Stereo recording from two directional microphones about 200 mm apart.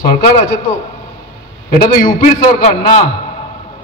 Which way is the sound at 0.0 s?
35° left (ahead or behind).